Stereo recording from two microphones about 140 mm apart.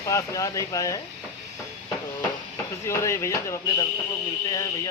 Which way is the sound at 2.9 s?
20° left (ahead or behind).